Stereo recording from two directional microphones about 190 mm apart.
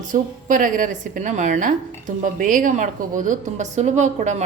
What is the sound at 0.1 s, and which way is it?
A woman's voice, 45° right (ahead or behind).